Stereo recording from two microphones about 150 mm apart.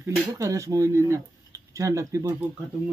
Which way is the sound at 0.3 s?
20° right (ahead or behind).